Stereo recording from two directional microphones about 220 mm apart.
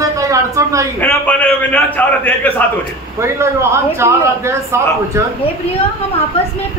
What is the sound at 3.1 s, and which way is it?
A man's voice, 10° right (ahead or behind).